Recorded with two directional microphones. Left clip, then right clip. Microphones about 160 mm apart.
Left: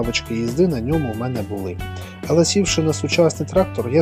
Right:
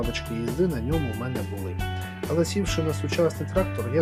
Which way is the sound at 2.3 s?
35° left (ahead or behind).